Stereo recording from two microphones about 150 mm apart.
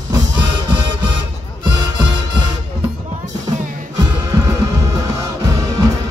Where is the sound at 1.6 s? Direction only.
30° right (ahead or behind).